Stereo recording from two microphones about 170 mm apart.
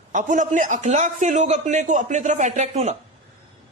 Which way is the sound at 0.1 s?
50° right (ahead or behind).